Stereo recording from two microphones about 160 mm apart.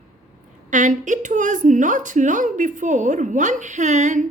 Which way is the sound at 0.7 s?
55° right (ahead or behind).